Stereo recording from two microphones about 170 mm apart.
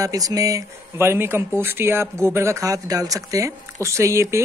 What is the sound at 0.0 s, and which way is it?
A man's voice, 20° right (ahead or behind).